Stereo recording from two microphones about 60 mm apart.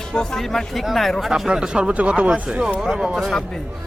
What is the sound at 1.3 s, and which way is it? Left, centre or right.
Speech, centre.